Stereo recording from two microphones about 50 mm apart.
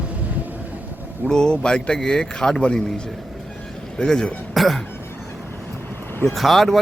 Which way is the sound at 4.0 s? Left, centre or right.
Centre.